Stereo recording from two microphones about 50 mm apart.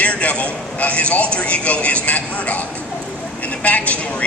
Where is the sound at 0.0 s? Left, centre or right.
Left.